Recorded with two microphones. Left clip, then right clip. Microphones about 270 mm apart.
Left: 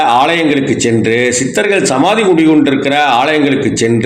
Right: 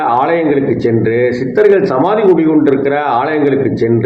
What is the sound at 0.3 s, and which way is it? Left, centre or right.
Speech, centre.